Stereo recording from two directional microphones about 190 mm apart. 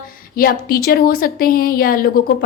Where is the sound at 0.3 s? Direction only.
50° left (ahead or behind).